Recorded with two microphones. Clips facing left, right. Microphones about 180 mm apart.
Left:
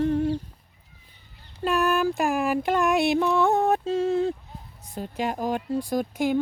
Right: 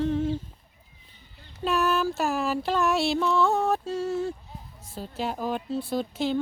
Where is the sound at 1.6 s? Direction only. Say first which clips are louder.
Left 2 dB; 10° left (ahead or behind).